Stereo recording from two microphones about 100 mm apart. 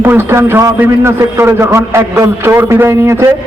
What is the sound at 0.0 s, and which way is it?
A man's voice, 20° right (ahead or behind).